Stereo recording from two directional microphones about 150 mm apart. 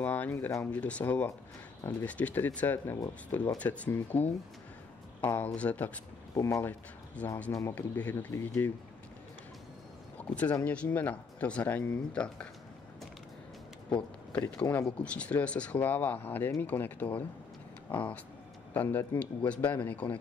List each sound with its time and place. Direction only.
0.0 s speech: 10° left (ahead or behind)
6.3 s speech: 20° left (ahead or behind)
7.2 s speech: 10° left (ahead or behind)
10.1 s speech: 10° left (ahead or behind)
14.3 s speech: 10° left (ahead or behind)